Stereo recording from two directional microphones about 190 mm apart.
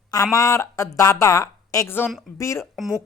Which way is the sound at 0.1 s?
20° left (ahead or behind).